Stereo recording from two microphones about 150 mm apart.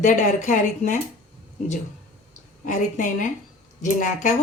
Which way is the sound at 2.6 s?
60° left (ahead or behind).